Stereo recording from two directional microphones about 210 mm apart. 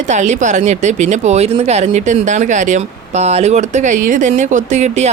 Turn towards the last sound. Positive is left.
turn(degrees=-35)  # may be behind; listen again after turning